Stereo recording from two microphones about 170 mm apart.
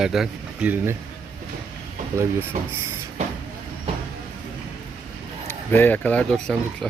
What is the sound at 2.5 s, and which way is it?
Speech, 50° right (ahead or behind).